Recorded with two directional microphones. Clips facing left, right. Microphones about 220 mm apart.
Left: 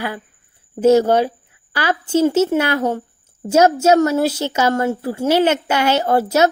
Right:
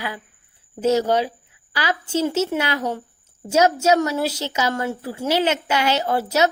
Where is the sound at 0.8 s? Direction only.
50° left (ahead or behind).